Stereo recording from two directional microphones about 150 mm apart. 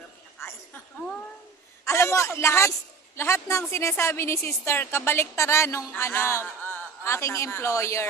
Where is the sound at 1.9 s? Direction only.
20° left (ahead or behind).